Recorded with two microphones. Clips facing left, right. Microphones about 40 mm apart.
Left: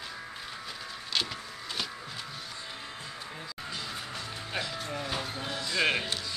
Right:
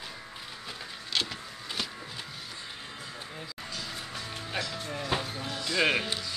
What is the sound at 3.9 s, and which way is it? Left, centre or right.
Music, centre.